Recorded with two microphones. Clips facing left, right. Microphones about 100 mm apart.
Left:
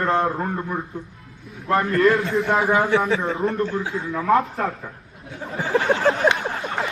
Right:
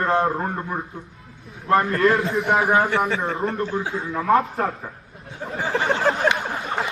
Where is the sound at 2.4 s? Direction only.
20° right (ahead or behind).